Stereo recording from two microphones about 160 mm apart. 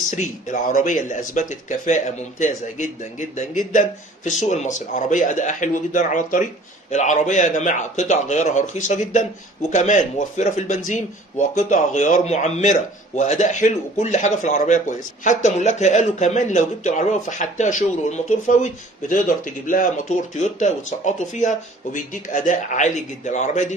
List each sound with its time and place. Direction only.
0.1 s a man's voice: 50° left (ahead or behind)